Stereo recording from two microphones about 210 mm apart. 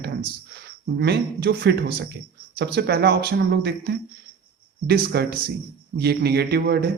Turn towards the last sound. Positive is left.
turn(degrees=-50)  # may be behind; listen again after turning